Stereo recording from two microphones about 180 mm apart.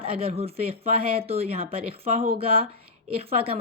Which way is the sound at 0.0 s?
30° right (ahead or behind).